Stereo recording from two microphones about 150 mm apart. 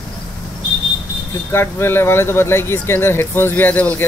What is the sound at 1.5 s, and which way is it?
Speech, 15° left (ahead or behind).